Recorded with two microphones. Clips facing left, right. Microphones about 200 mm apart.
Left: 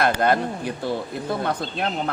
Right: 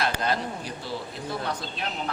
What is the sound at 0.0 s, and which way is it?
Speech, 55° left (ahead or behind).